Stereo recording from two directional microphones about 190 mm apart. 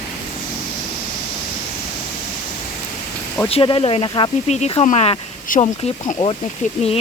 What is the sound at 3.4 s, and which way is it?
Speech, 30° left (ahead or behind).